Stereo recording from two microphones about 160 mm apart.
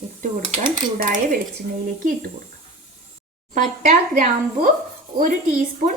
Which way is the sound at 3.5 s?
55° right (ahead or behind).